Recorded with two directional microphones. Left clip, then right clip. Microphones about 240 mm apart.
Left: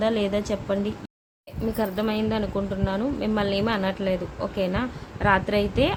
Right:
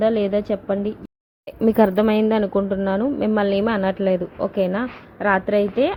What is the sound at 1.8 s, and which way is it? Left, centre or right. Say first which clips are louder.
A woman's voice: right 9 dB; right.